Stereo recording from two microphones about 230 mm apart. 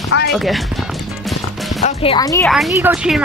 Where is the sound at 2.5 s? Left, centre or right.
Centre.